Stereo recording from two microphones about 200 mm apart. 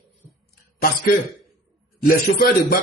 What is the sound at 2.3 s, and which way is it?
Speech, 50° left (ahead or behind).